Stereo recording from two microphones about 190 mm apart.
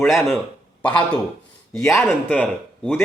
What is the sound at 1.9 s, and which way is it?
Speech, 5° left (ahead or behind).